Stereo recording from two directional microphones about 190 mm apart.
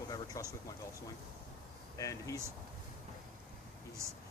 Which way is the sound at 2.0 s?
15° left (ahead or behind).